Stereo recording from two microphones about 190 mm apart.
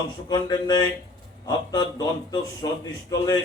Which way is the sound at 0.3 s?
20° left (ahead or behind).